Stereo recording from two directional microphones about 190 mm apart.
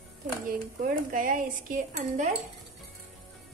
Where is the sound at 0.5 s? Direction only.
45° right (ahead or behind).